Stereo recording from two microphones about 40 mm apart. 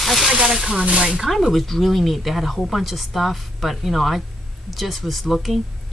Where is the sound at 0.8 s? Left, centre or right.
Right.